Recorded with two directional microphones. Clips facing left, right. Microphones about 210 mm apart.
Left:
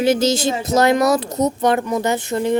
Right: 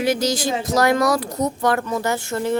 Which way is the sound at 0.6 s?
25° left (ahead or behind).